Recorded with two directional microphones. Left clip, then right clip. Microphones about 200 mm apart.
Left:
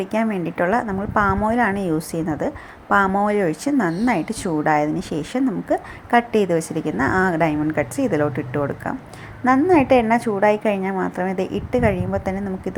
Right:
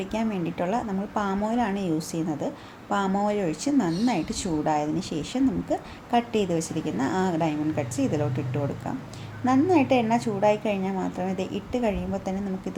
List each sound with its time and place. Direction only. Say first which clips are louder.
0.0 s a woman's voice: left 7 dB; 20° left (ahead or behind)